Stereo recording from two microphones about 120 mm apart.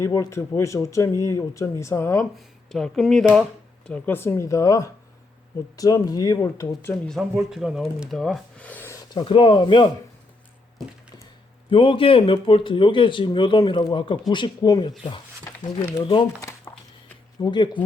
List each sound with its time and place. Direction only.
0.0 s speech: 25° left (ahead or behind)
2.3 s speech: 5° left (ahead or behind)
3.8 s speech: 10° left (ahead or behind)
7.1 s speech: centre (ahead or behind)
8.9 s a sound: 30° left (ahead or behind)
9.2 s speech: 45° left (ahead or behind)
11.7 s speech: 45° left (ahead or behind)
16.4 s a sound: 25° left (ahead or behind)
17.4 s speech: 40° left (ahead or behind)